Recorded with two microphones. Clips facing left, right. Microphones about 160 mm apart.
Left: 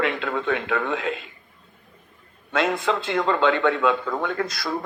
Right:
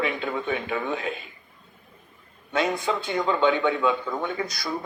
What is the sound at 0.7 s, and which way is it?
Speech, 85° left.